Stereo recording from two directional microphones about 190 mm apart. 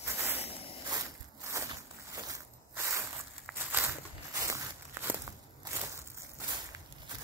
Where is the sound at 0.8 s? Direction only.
15° right (ahead or behind).